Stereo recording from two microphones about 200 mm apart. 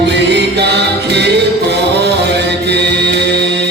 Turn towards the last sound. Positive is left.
turn(degrees=-55)  # may be behind; listen again after turning